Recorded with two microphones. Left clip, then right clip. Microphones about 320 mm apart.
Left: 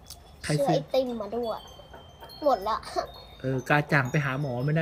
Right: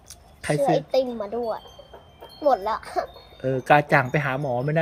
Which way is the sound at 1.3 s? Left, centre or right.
Right.